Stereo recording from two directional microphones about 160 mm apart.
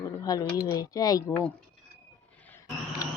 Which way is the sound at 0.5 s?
25° left (ahead or behind).